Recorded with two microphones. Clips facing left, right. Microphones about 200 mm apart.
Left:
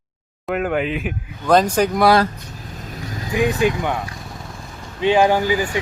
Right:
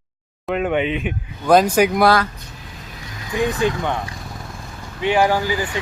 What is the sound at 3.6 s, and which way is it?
Speech, 10° left (ahead or behind).